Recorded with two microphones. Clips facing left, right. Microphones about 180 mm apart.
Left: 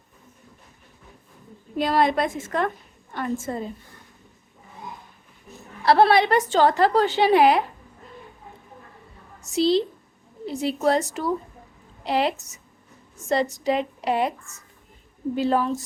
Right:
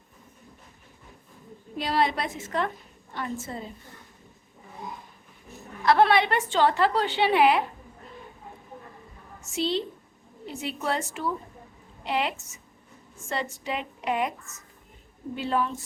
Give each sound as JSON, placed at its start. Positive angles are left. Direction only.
{"t": 1.8, "sound": "a woman's voice", "side_deg": 50}
{"t": 5.8, "sound": "a woman's voice", "side_deg": 35}
{"t": 9.5, "sound": "a woman's voice", "side_deg": 35}
{"t": 15.4, "sound": "a woman's voice", "side_deg": 40}